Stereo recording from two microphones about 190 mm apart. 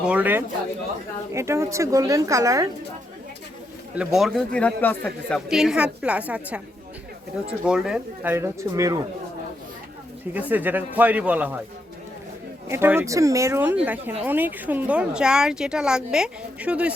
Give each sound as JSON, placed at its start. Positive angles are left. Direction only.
{"t": 0.0, "sound": "a woman's voice", "side_deg": -5}
{"t": 3.9, "sound": "speech", "side_deg": -5}
{"t": 5.5, "sound": "a woman's voice", "side_deg": 0}
{"t": 7.6, "sound": "a woman's voice", "side_deg": -5}
{"t": 10.3, "sound": "a woman's voice", "side_deg": -10}
{"t": 12.6, "sound": "a woman's voice", "side_deg": -10}